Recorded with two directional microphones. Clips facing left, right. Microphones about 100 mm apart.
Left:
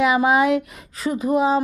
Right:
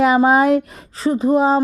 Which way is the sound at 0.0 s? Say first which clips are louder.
Right 4 dB; 35° right (ahead or behind).